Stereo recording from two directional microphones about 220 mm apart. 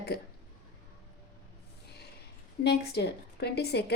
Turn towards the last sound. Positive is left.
turn(degrees=50)  # may be behind; listen again after turning